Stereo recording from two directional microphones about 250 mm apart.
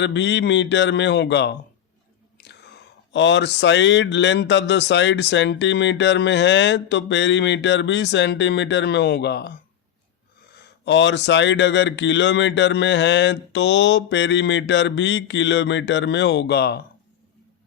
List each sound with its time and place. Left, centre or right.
0.0 s speech: left
2.4 s chewing: left
3.1 s speech: left
10.8 s speech: left